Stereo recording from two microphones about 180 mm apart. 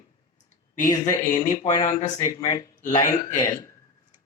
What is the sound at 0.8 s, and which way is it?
Speech, 20° left (ahead or behind).